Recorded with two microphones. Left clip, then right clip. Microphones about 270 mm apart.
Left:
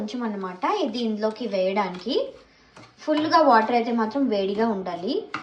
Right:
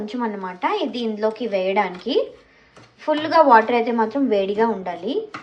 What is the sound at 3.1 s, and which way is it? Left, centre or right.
A woman's voice, centre.